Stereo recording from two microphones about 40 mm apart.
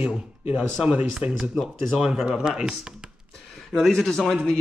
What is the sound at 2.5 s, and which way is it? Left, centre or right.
Speech, right.